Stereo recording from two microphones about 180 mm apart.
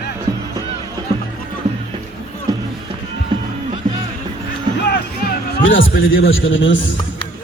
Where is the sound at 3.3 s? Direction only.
25° right (ahead or behind).